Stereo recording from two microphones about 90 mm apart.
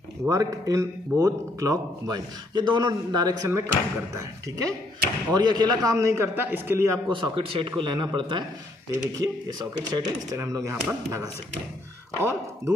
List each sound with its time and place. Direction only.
0.2 s speech: 40° right (ahead or behind)
3.4 s a man's voice: 30° right (ahead or behind)
5.3 s a man's voice: 50° right (ahead or behind); by 7.0 s 25° right (ahead or behind)
7.1 s a man's voice: 80° right; by 8.5 s 60° right (ahead or behind)
9.2 s a man's voice: 50° right (ahead or behind); by 12.7 s 30° right (ahead or behind)